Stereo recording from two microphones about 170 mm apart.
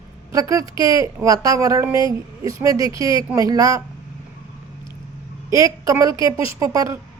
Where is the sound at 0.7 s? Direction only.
30° left (ahead or behind).